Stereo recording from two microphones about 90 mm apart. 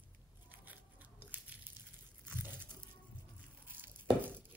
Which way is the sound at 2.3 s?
20° right (ahead or behind).